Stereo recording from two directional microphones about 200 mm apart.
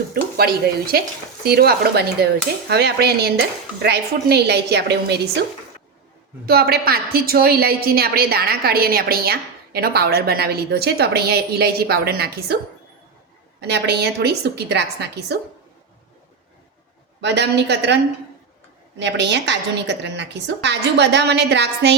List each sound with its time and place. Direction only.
0.1 s a woman's voice: 50° right (ahead or behind)
6.4 s a woman's voice: 50° right (ahead or behind)
13.6 s a woman's voice: 55° right (ahead or behind)
17.2 s a woman's voice: 60° right (ahead or behind)